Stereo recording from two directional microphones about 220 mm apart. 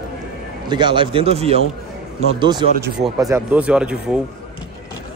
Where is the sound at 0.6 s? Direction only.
20° right (ahead or behind); by 4.2 s 5° right (ahead or behind).